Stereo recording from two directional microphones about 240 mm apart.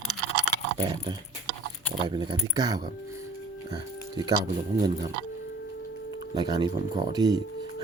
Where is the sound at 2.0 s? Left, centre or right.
Centre.